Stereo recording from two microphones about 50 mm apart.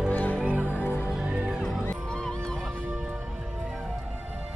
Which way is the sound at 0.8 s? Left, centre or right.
Left.